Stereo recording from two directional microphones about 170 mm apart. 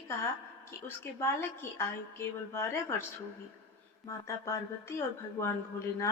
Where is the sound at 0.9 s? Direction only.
15° left (ahead or behind).